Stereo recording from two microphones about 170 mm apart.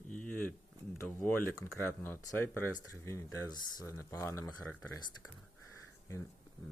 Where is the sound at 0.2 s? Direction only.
5° left (ahead or behind).